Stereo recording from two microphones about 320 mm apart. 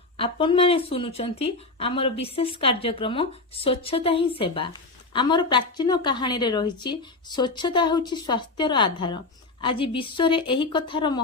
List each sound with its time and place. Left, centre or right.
0.2 s a woman's voice: centre